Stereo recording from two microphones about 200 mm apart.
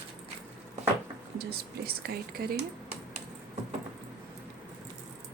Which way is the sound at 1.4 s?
50° right (ahead or behind).